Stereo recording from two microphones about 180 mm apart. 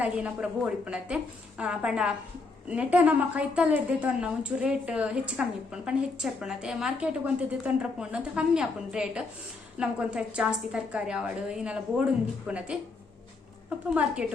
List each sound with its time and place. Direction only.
0.0 s a woman's voice: 10° right (ahead or behind)
13.9 s a woman's voice: 5° right (ahead or behind)